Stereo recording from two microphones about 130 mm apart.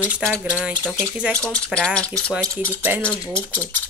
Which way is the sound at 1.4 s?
5° left (ahead or behind).